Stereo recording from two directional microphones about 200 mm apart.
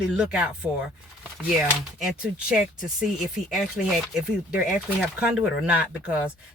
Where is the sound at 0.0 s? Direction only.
5° right (ahead or behind).